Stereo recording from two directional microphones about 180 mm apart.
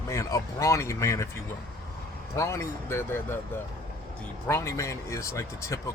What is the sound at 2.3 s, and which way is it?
Speech, 15° left (ahead or behind).